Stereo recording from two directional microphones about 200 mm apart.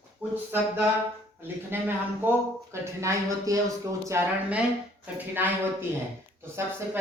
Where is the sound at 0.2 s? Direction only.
5° right (ahead or behind).